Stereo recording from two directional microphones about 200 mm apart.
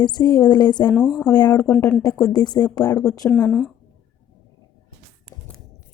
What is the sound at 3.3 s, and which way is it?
Speech, 5° left (ahead or behind).